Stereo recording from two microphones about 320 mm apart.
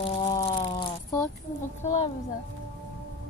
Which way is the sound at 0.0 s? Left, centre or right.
Centre.